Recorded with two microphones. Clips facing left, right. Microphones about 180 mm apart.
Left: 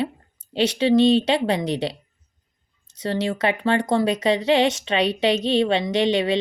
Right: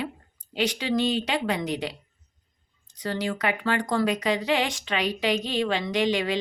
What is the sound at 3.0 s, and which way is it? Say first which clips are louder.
A woman's voice: left 5 dB; 25° left (ahead or behind).